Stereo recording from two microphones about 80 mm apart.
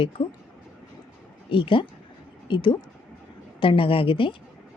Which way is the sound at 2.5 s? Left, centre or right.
Left.